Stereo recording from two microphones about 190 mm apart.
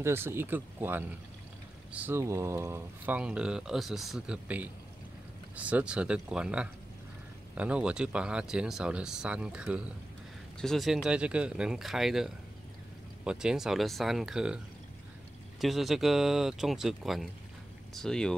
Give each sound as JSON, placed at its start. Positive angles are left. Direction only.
{"t": 0.0, "sound": "speech", "side_deg": -15}
{"t": 15.6, "sound": "speech", "side_deg": 0}